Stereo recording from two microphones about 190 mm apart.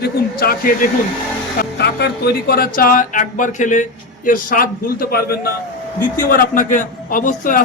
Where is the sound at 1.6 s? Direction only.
60° left (ahead or behind).